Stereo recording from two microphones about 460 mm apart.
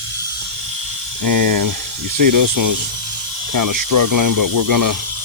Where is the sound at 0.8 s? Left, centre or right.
Right.